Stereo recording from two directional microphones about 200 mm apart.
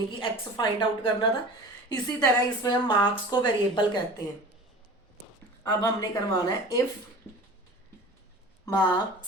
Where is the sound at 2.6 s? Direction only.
25° left (ahead or behind).